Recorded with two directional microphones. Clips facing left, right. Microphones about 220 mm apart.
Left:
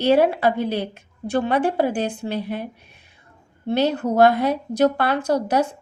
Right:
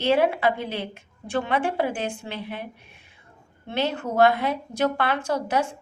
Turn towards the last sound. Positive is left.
turn(degrees=40)  # may be behind; listen again after turning